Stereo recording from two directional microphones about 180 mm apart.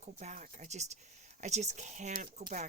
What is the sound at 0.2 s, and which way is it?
Speech, 40° right (ahead or behind).